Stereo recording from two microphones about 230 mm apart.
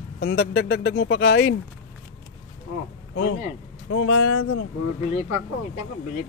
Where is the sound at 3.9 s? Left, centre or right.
Left.